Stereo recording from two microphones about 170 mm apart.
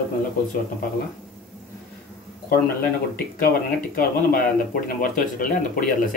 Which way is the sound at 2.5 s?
60° left (ahead or behind).